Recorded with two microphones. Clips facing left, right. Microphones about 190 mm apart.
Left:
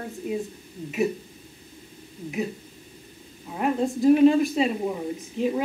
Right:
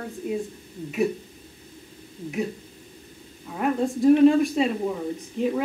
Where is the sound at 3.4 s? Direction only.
10° left (ahead or behind).